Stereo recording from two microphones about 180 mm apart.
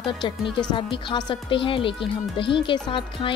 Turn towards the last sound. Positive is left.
turn(degrees=30)  # may be behind; listen again after turning